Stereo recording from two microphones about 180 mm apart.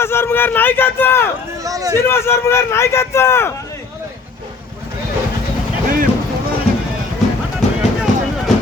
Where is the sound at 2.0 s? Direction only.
15° left (ahead or behind).